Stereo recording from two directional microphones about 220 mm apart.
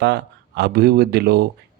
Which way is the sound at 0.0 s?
50° right (ahead or behind).